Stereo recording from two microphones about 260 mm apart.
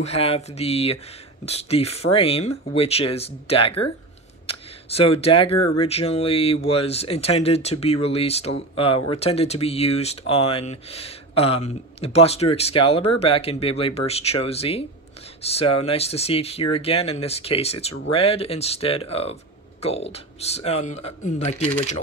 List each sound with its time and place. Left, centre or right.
0.0 s speech: left